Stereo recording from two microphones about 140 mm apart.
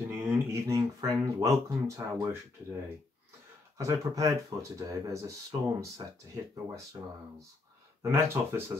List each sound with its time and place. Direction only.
0.1 s speech: 15° right (ahead or behind)
3.7 s speech: 25° right (ahead or behind)
8.0 s speech: 15° right (ahead or behind)